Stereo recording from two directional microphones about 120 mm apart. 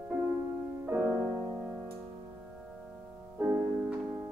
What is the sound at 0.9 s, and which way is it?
Music, 15° right (ahead or behind).